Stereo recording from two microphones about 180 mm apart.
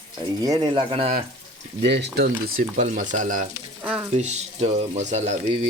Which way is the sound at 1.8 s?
70° right (ahead or behind).